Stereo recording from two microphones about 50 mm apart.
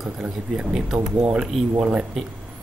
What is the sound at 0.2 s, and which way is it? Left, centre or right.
Speech, centre.